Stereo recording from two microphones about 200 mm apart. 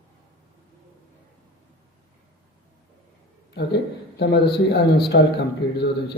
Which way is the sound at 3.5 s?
55° left (ahead or behind).